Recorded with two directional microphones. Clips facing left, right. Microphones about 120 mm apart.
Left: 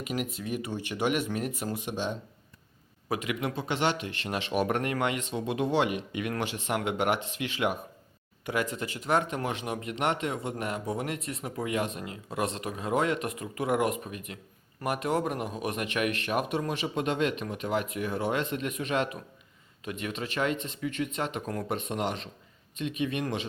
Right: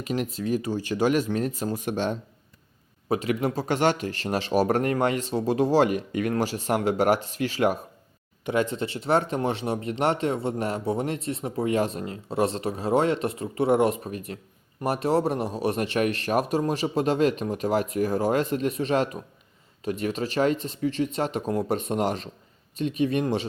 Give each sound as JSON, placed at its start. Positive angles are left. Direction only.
{"t": 0.0, "sound": "speech", "side_deg": -35}
{"t": 1.8, "sound": "speech", "side_deg": -50}
{"t": 3.1, "sound": "speech", "side_deg": -35}
{"t": 8.4, "sound": "speech", "side_deg": -25}